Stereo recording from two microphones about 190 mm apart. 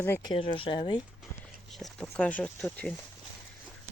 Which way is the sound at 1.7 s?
5° left (ahead or behind).